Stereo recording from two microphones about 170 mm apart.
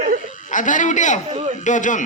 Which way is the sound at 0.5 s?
50° left (ahead or behind).